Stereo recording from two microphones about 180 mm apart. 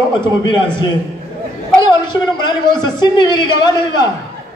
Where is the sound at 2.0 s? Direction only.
25° left (ahead or behind).